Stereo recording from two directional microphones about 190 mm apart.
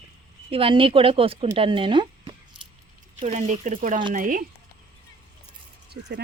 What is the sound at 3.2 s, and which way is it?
Speech, 35° right (ahead or behind).